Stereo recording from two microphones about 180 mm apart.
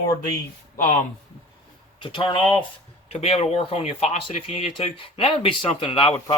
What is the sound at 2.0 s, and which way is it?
Speech, 25° left (ahead or behind).